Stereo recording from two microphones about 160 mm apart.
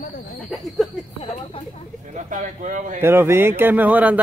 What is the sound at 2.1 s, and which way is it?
Speech, 55° right (ahead or behind).